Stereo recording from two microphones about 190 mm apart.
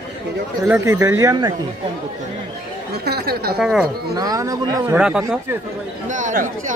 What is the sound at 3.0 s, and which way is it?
Speech, 55° right (ahead or behind).